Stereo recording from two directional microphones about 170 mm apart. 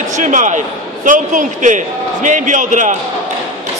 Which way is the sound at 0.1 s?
45° right (ahead or behind).